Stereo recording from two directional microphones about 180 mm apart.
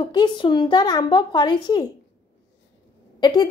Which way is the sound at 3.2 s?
25° left (ahead or behind).